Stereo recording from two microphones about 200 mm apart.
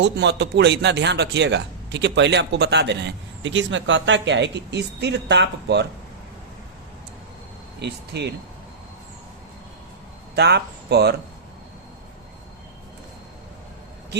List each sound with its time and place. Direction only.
0.0 s speech: 60° right (ahead or behind)
7.8 s speech: 55° right (ahead or behind)
10.3 s speech: 55° right (ahead or behind)